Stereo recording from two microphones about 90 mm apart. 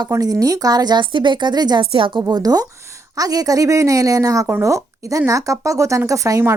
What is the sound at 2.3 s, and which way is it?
A woman's voice, 45° right (ahead or behind).